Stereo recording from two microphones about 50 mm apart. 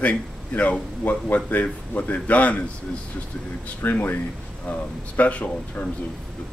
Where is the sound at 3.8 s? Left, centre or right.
Left.